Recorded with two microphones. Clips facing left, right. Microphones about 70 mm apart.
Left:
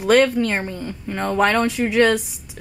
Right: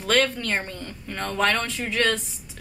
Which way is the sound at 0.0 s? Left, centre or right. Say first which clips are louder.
Left 7 dB; centre.